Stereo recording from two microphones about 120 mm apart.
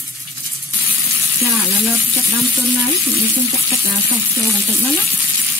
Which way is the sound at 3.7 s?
25° right (ahead or behind).